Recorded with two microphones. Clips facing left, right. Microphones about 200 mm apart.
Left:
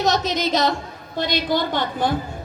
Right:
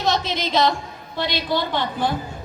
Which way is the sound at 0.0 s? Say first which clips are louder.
Left 2 dB; 45° left (ahead or behind).